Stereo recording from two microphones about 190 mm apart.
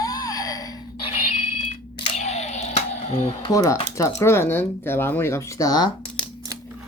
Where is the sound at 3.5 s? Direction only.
15° left (ahead or behind).